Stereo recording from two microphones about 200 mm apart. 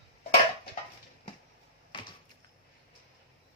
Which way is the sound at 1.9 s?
25° left (ahead or behind).